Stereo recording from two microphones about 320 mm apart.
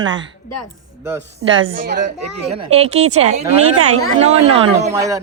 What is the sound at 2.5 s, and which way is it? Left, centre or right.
Speech, centre.